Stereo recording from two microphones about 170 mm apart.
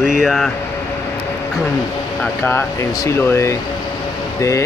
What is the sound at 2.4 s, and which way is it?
Speech, 15° left (ahead or behind).